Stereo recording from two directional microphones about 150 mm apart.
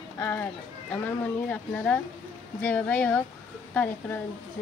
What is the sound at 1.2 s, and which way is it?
Speech, 10° left (ahead or behind).